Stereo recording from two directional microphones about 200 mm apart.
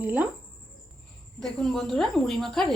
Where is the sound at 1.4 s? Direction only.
5° left (ahead or behind).